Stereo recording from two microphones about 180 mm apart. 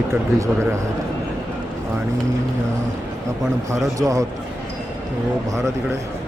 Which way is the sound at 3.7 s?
20° right (ahead or behind).